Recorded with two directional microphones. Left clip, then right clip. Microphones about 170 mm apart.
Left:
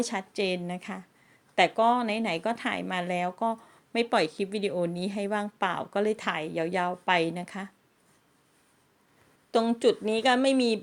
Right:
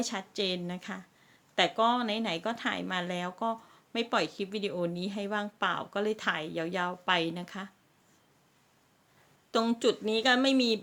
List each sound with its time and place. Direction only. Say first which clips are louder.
0.0 s a woman's voice: left 3 dB; 20° left (ahead or behind)
9.5 s a woman's voice: left 4 dB; 10° left (ahead or behind)